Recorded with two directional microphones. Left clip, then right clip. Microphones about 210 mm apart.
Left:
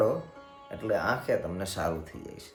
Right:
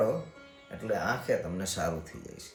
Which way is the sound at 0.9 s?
10° left (ahead or behind).